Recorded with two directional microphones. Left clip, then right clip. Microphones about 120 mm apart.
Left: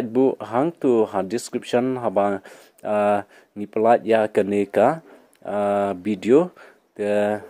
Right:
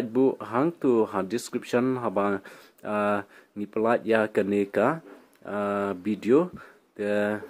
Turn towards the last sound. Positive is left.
turn(degrees=25)  # may be behind; listen again after turning